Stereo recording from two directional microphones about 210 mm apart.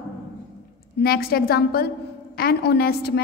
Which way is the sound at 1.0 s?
45° left (ahead or behind).